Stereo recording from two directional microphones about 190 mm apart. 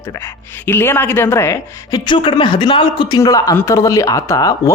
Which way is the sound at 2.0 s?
25° left (ahead or behind).